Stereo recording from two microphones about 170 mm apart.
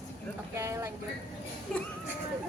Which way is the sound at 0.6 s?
15° right (ahead or behind).